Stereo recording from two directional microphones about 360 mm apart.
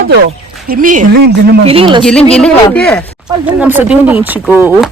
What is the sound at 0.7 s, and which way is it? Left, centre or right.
Speech, right.